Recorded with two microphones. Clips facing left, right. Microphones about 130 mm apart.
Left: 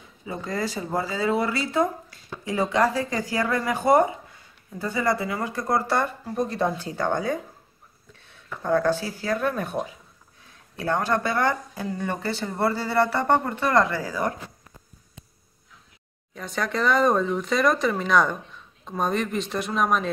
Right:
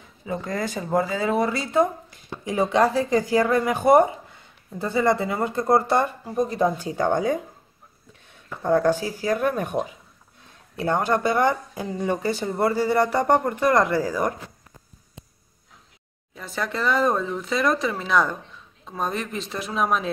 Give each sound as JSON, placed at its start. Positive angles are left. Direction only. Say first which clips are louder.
{"t": 0.7, "sound": "speech", "louder": "right 4 dB", "side_deg": -15}
{"t": 8.5, "sound": "speech", "louder": "right 2 dB", "side_deg": -15}
{"t": 16.3, "sound": "speech", "louder": "left 1 dB", "side_deg": 0}